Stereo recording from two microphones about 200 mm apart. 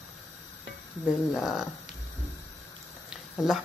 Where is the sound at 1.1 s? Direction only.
Centre (ahead or behind).